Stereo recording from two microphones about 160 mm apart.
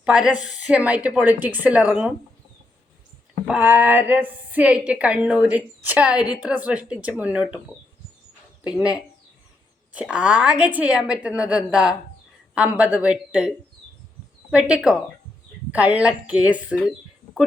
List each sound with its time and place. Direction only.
0.0 s a woman's voice: 5° right (ahead or behind)
3.4 s a woman's voice: 10° right (ahead or behind)
9.9 s a woman's voice: 5° right (ahead or behind)
14.5 s a woman's voice: 5° right (ahead or behind)